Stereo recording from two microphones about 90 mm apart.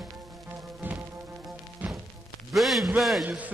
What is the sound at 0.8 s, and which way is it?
Music, 20° right (ahead or behind).